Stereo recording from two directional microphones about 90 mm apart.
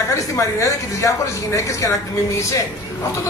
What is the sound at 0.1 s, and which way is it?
Speech, 35° left (ahead or behind).